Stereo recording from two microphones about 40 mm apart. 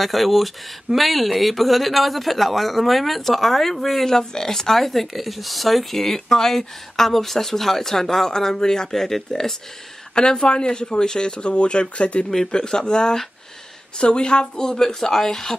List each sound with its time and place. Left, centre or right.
0.0 s speech: centre; by 12.3 s left
12.4 s speech: centre